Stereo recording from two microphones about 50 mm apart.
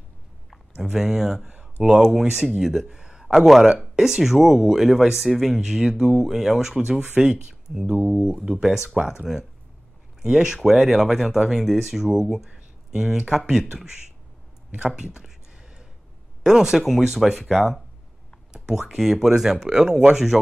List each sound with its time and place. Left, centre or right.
0.9 s speech: centre
10.2 s speech: centre
14.8 s speech: centre
15.1 s a sound: centre
16.4 s speech: centre